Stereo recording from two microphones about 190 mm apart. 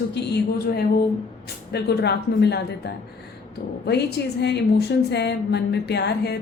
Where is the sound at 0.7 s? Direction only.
55° left (ahead or behind).